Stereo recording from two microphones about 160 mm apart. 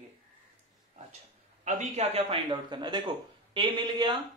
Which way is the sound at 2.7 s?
25° right (ahead or behind).